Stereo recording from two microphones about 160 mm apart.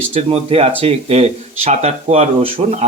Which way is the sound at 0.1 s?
40° right (ahead or behind).